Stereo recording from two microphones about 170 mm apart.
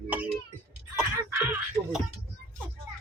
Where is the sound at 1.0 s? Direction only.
15° right (ahead or behind).